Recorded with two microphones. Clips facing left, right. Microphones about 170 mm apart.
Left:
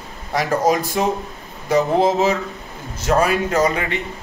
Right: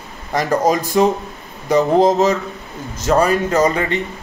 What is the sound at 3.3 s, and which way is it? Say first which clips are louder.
Speech: right 3 dB; 45° right (ahead or behind).